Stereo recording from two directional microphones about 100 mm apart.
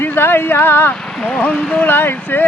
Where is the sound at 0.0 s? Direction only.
20° left (ahead or behind).